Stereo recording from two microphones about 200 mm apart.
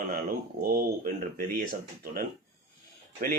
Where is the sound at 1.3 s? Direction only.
45° right (ahead or behind).